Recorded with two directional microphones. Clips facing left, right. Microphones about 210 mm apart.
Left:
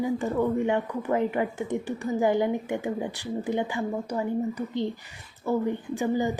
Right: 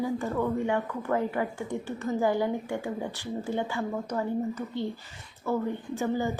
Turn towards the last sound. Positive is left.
turn(degrees=15)  # may be behind; listen again after turning